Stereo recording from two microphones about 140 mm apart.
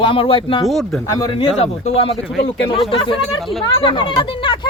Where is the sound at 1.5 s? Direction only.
50° left (ahead or behind).